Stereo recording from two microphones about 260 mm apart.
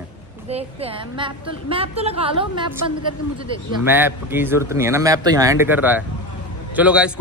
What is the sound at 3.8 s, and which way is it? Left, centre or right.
A man's voice, centre.